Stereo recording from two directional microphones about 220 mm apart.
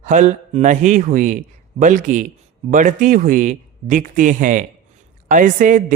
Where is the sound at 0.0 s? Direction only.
35° right (ahead or behind).